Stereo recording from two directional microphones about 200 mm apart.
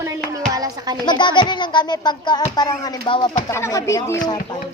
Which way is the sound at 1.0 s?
20° left (ahead or behind).